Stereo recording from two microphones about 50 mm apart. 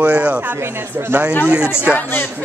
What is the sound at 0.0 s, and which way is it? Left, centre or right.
Speech, right.